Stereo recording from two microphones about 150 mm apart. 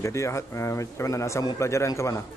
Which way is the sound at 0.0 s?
20° left (ahead or behind).